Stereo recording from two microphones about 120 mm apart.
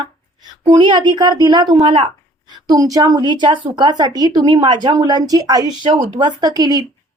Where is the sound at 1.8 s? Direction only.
55° right (ahead or behind).